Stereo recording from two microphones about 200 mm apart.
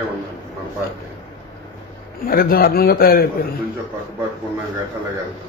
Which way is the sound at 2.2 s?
45° left (ahead or behind).